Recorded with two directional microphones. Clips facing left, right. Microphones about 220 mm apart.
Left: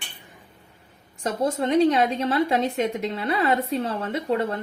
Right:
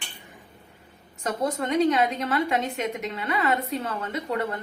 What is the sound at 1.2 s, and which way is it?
A woman's voice, 30° left (ahead or behind).